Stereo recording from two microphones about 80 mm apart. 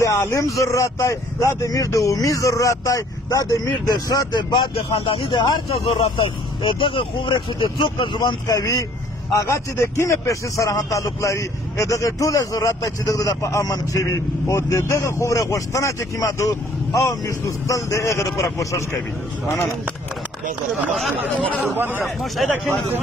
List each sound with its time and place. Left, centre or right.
0.0 s speech: left
6.6 s speech: left
8.5 s speech: left
22.2 s speech: centre